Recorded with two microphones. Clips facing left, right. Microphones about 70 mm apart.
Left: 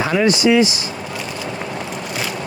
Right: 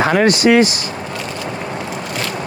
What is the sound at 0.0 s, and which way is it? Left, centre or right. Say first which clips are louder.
Speech: right 3 dB; right.